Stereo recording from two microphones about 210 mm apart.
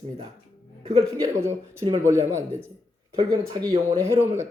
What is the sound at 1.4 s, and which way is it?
A man's voice, 15° right (ahead or behind).